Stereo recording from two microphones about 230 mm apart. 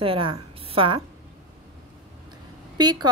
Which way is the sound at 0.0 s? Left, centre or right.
Right.